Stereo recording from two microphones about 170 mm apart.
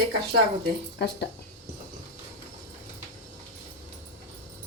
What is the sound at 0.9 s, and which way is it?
Speech, 80° left.